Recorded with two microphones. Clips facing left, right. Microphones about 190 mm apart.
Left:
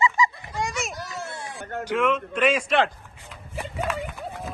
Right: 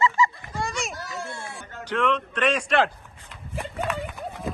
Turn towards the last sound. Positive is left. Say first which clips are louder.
# right 2 dB
turn(degrees=0)  # may be behind; listen again after turning